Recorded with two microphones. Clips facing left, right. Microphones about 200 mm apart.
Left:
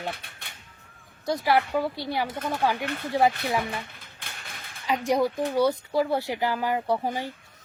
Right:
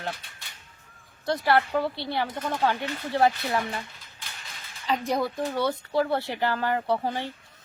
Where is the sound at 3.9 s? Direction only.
55° left (ahead or behind).